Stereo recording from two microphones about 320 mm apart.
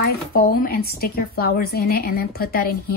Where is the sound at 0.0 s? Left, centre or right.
Left.